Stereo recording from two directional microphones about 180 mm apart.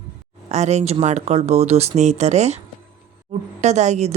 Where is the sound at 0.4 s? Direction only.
40° right (ahead or behind).